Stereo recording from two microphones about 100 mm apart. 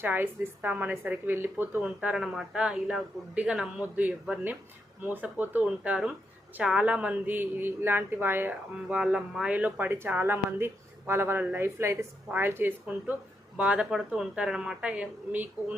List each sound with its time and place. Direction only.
0.0 s a woman's voice: 20° right (ahead or behind)
8.9 s a woman's voice: 5° right (ahead or behind)